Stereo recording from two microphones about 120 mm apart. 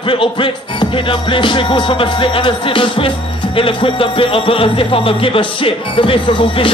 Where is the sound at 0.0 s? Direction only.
45° left (ahead or behind).